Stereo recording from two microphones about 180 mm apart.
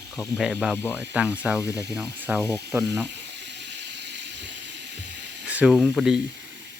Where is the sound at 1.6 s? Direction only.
20° left (ahead or behind).